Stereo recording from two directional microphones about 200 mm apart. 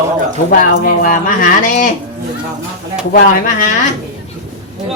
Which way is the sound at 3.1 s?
40° left (ahead or behind).